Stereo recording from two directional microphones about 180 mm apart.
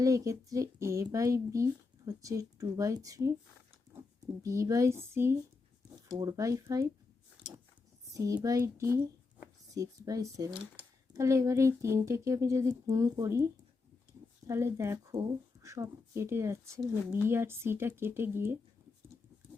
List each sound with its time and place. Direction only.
0.0 s speech: 20° right (ahead or behind)
4.4 s speech: 15° right (ahead or behind)
8.1 s speech: 20° right (ahead or behind)